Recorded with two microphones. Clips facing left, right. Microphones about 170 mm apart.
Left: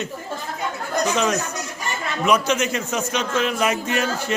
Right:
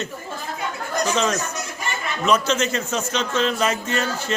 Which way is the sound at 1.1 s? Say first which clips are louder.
Left 1 dB; 10° left (ahead or behind).